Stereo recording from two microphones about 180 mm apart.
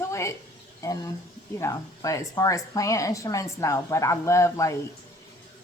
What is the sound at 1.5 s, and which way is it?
A woman's voice, 15° left (ahead or behind).